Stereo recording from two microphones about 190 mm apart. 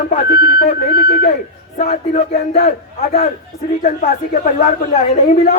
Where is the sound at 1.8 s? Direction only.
35° left (ahead or behind).